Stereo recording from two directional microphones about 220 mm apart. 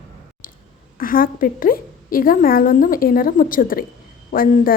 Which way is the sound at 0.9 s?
40° left (ahead or behind).